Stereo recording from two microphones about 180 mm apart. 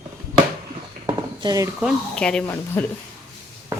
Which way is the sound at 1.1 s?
20° right (ahead or behind).